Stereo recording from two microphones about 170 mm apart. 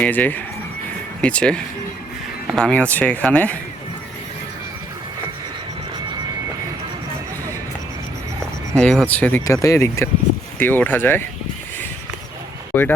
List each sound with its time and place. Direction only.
0.0 s speech: 10° left (ahead or behind)
8.7 s speech: 5° left (ahead or behind)
12.7 s speech: 10° left (ahead or behind)